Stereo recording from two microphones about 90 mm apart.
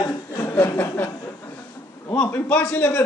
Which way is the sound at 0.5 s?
20° left (ahead or behind).